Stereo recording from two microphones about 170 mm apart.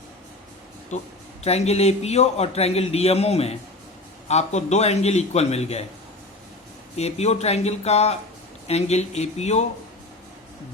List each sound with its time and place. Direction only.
0.9 s speech: 45° left (ahead or behind)
6.9 s speech: 40° left (ahead or behind)